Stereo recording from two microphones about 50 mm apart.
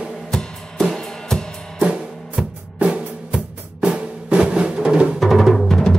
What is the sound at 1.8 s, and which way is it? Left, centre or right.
Music, centre.